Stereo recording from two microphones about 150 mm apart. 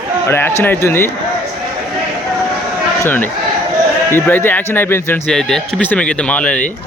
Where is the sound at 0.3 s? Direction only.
15° left (ahead or behind).